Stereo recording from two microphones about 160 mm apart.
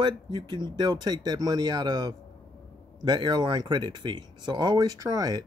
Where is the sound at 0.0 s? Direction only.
30° right (ahead or behind).